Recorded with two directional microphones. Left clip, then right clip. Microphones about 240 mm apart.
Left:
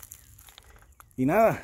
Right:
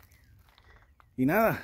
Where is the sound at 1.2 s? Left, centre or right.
Centre.